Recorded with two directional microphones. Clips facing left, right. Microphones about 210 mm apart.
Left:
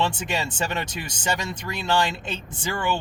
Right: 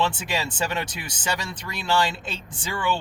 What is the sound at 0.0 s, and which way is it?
Speech, 20° left (ahead or behind).